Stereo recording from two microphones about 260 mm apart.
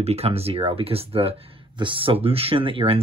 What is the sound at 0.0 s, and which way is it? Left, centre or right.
Speech, right.